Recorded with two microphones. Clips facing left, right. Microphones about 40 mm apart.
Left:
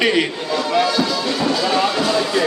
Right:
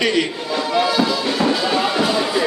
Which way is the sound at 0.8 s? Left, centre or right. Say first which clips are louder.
Right 1 dB; centre.